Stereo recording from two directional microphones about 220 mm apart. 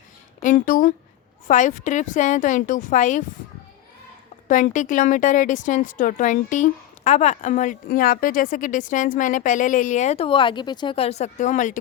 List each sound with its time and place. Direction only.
0.4 s a woman's voice: 35° left (ahead or behind)
4.4 s a woman's voice: 35° left (ahead or behind)